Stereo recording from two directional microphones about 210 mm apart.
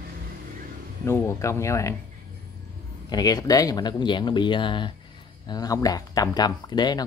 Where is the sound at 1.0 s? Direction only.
10° left (ahead or behind).